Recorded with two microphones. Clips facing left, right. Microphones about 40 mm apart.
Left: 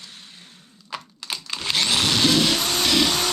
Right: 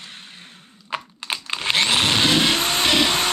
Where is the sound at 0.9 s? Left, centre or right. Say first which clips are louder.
Right 5 dB; right.